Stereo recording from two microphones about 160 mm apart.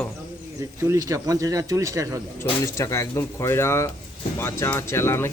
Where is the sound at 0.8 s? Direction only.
20° right (ahead or behind).